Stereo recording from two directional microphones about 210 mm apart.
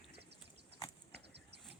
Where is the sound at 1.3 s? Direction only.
50° right (ahead or behind).